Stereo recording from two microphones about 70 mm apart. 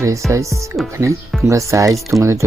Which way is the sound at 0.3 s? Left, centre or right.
Right.